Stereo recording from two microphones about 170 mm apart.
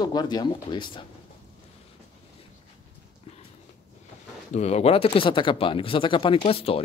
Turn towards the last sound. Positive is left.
turn(degrees=35)  # may be behind; listen again after turning